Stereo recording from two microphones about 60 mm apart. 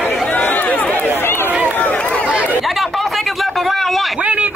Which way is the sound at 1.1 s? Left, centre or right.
Left.